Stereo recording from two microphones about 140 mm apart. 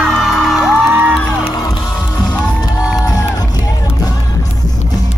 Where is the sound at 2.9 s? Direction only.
25° left (ahead or behind).